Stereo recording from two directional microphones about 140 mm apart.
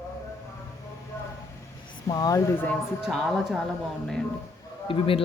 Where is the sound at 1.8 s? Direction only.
30° left (ahead or behind).